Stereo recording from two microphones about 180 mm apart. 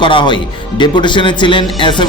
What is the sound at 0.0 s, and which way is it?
A man's voice, 25° left (ahead or behind).